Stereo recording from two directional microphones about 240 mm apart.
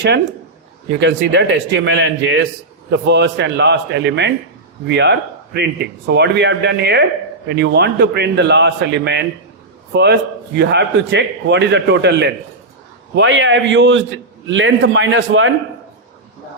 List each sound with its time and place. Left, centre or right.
0.9 s a man's voice: right